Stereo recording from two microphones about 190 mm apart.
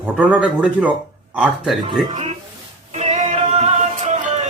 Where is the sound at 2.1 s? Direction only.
30° right (ahead or behind).